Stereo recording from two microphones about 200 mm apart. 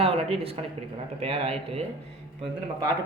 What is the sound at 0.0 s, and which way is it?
A man's voice, 30° right (ahead or behind).